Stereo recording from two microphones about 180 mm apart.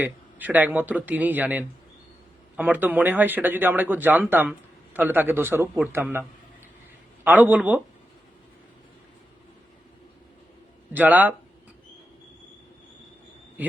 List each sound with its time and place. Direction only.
0.0 s speech: 10° right (ahead or behind)
7.3 s speech: 10° right (ahead or behind)
10.9 s speech: 10° right (ahead or behind)